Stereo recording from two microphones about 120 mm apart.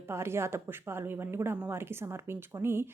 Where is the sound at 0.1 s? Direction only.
20° right (ahead or behind).